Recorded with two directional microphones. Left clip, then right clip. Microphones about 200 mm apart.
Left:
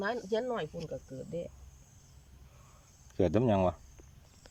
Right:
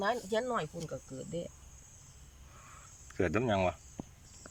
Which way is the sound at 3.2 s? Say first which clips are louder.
Left 3 dB; 20° left (ahead or behind).